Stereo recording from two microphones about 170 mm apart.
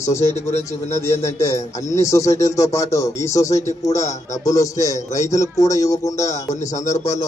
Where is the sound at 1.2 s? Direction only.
15° left (ahead or behind).